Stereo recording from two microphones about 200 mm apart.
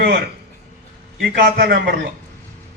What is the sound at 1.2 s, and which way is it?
Speech, 50° right (ahead or behind).